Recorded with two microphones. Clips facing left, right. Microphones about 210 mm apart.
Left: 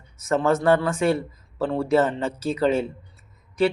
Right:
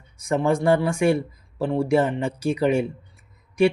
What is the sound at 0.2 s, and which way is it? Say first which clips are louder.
Speech: even; 15° right (ahead or behind).